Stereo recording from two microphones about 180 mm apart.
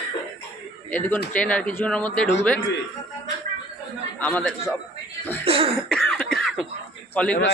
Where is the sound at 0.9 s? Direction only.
10° left (ahead or behind).